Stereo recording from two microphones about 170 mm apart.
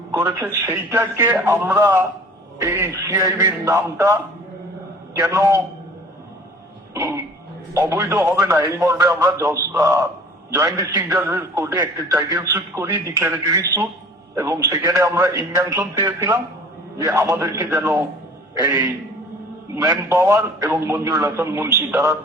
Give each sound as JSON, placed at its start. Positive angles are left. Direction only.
{"t": 0.1, "sound": "a man's voice", "side_deg": -15}
{"t": 6.9, "sound": "a man's voice", "side_deg": -15}
{"t": 19.7, "sound": "a man's voice", "side_deg": -20}